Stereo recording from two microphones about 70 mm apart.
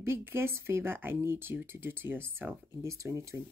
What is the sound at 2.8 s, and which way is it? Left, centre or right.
Speech, right.